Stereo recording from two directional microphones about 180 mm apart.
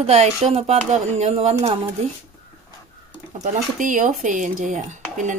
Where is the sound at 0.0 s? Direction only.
35° right (ahead or behind).